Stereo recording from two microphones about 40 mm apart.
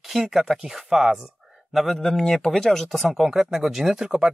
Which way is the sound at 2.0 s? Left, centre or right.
Centre.